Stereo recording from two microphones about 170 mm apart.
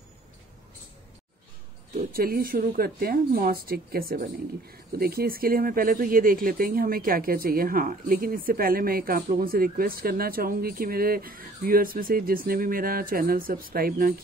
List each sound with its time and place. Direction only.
2.1 s speech: 60° right (ahead or behind)